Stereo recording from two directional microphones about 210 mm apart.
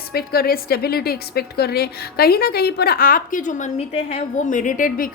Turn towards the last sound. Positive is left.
turn(degrees=40)  # may be behind; listen again after turning